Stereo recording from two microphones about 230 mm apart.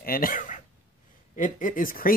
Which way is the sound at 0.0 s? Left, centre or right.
Left.